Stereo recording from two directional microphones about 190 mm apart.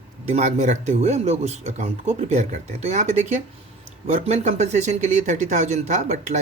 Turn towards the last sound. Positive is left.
turn(degrees=-35)  # may be behind; listen again after turning